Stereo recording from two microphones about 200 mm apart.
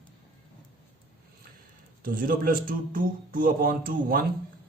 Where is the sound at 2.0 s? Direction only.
45° right (ahead or behind).